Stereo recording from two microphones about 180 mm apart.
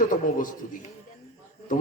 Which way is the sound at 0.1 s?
50° left (ahead or behind).